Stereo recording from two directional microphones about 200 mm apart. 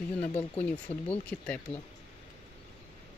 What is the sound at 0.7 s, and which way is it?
Speech, 5° left (ahead or behind).